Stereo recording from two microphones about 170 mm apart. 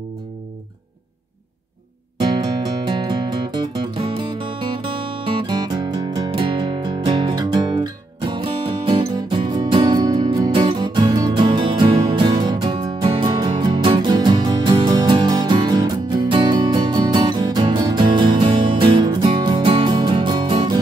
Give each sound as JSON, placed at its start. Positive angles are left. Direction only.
{"t": 2.9, "sound": "music", "side_deg": -25}